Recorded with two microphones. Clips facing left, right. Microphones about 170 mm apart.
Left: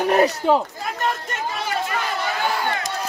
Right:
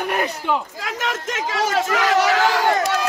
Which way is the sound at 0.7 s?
90° right.